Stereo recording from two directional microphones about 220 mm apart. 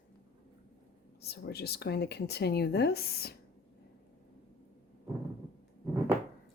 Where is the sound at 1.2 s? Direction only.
45° left (ahead or behind).